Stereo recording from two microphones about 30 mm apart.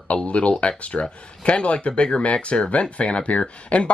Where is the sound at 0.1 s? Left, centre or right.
Left.